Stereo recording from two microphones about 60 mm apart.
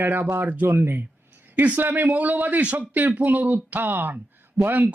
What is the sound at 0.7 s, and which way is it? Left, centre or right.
Speech, right.